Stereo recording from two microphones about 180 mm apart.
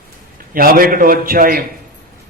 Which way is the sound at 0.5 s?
55° right (ahead or behind).